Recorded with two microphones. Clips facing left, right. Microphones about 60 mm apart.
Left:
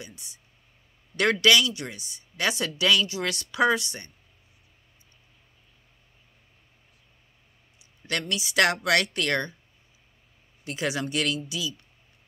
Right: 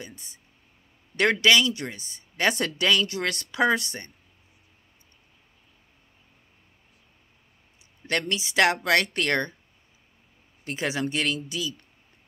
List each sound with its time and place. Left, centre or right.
0.0 s speech: right
7.8 s speech: right
10.6 s speech: right